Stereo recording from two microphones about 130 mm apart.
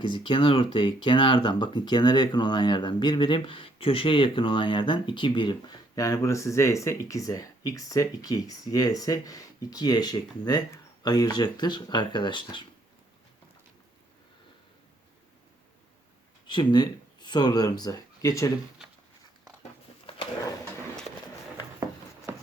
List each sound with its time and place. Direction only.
0.1 s speech: 40° left (ahead or behind)
16.5 s speech: 35° left (ahead or behind)
20.1 s a sound: 45° left (ahead or behind)